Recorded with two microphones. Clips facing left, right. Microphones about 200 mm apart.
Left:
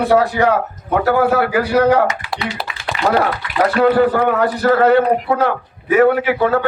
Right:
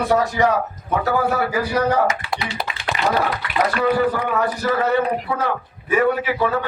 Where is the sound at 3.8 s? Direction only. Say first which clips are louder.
Left 7 dB; 70° left (ahead or behind).